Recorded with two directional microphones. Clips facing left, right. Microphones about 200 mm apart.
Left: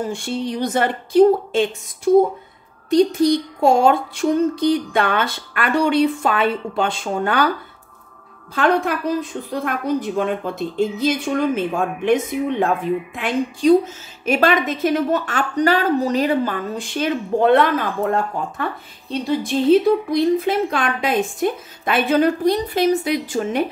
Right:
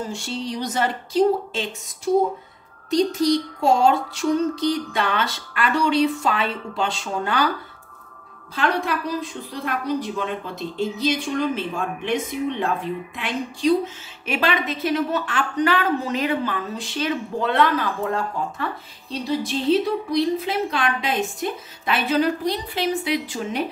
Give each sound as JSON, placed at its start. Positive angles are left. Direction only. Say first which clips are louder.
{"t": 0.1, "sound": "a woman's voice", "louder": "left 4 dB", "side_deg": 55}
{"t": 2.9, "sound": "a woman's voice", "louder": "left 4 dB", "side_deg": 55}
{"t": 8.5, "sound": "a woman's voice", "louder": "left 5 dB", "side_deg": 50}